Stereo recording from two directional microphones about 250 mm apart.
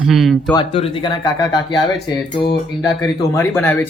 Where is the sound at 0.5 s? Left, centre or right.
Left.